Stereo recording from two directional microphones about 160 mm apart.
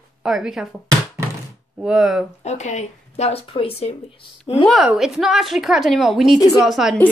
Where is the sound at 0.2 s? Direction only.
5° right (ahead or behind).